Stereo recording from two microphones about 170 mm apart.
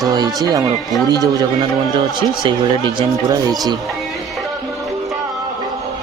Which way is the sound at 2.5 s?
25° right (ahead or behind).